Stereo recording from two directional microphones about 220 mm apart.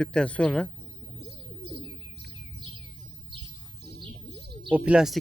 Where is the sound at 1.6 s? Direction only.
50° right (ahead or behind).